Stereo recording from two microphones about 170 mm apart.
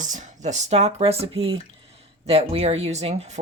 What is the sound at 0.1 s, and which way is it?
Speech, 45° right (ahead or behind).